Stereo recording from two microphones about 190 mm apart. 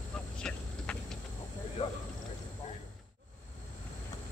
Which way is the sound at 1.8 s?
30° left (ahead or behind).